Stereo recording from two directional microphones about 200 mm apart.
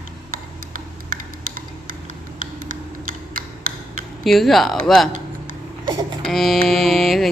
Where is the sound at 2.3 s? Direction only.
45° right (ahead or behind).